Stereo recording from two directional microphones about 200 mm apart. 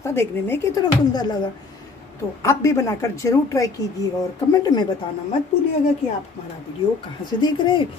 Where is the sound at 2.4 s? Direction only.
15° left (ahead or behind).